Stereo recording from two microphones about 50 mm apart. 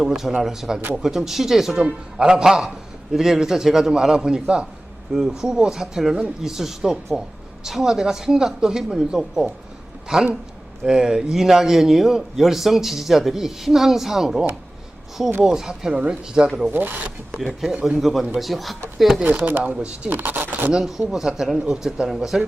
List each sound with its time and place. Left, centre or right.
0.0 s a man's voice: centre
15.4 s a man's voice: centre
16.7 s speech: right
17.4 s a man's voice: centre
19.4 s speech: right
19.7 s speech: centre
20.1 s speech: right
20.7 s a man's voice: centre